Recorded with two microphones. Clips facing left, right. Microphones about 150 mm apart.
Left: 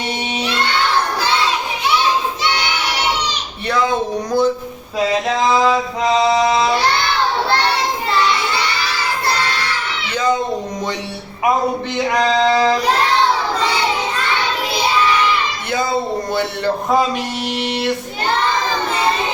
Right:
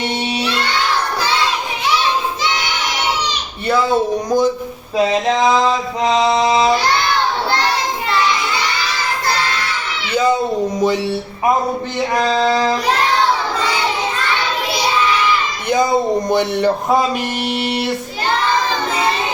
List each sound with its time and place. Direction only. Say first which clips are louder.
4.3 s speech: left 1 dB; 15° right (ahead or behind)
12.1 s a sound: left 1 dB; 5° right (ahead or behind)
15.7 s speech: right 5 dB; 20° right (ahead or behind)